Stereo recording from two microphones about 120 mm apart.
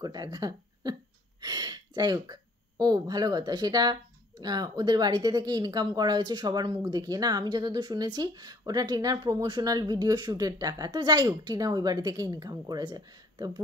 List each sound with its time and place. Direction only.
0.0 s speech: 35° right (ahead or behind)